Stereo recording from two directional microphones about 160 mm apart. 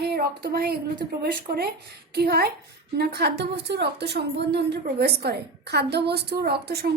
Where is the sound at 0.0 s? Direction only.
85° right.